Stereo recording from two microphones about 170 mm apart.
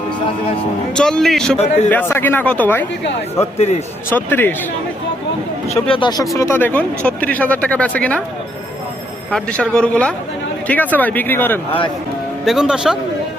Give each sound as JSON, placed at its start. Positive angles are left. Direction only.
{"t": 0.9, "sound": "a man's voice", "side_deg": 5}
{"t": 1.5, "sound": "a man's voice", "side_deg": 40}
{"t": 1.9, "sound": "speech", "side_deg": 10}
{"t": 4.1, "sound": "speech", "side_deg": 10}
{"t": 5.6, "sound": "speech", "side_deg": 35}
{"t": 9.3, "sound": "speech", "side_deg": 5}
{"t": 12.5, "sound": "a man's voice", "side_deg": -5}